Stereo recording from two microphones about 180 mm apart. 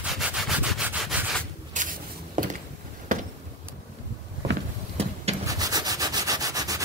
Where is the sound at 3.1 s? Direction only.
50° right (ahead or behind).